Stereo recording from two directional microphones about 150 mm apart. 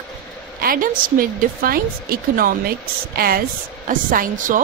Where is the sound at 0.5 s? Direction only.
75° right (ahead or behind).